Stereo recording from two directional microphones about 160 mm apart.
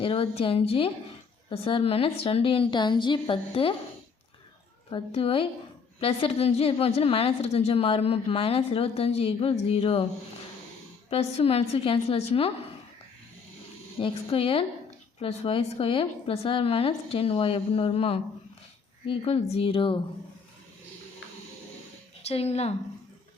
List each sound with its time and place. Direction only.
0.0 s a woman's voice: 35° left (ahead or behind)
4.9 s a woman's voice: 35° left (ahead or behind)
11.1 s a woman's voice: 40° left (ahead or behind)
14.0 s a woman's voice: 35° left (ahead or behind)
22.3 s a woman's voice: 40° left (ahead or behind)